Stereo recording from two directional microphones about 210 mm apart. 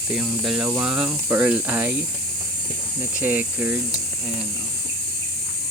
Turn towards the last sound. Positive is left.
turn(degrees=-5)  # may be behind; listen again after turning